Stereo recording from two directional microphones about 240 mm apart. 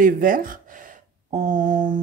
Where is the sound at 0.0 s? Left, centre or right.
Right.